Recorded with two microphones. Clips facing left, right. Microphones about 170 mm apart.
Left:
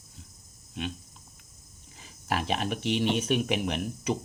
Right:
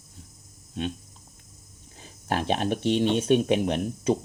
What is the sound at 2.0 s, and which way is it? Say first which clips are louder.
Speech: right 3 dB; 35° right (ahead or behind).